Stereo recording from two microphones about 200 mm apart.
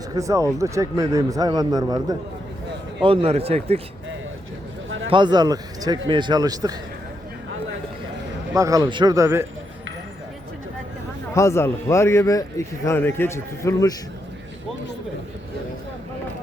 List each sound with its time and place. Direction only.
0.1 s speech: 15° right (ahead or behind)
5.0 s speech: 25° right (ahead or behind)
8.5 s speech: 15° right (ahead or behind)
11.3 s a man's voice: 15° left (ahead or behind)